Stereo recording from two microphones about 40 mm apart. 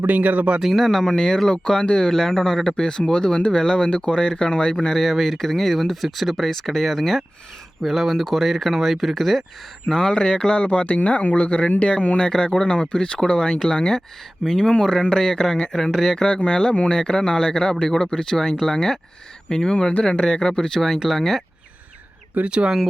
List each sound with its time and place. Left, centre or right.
0.2 s speech: right
0.6 s speech: centre; by 2.0 s left
2.0 s speech: centre
4.9 s speech: centre
9.9 s speech: centre
19.7 s speech: left
20.2 s speech: centre
22.4 s speech: right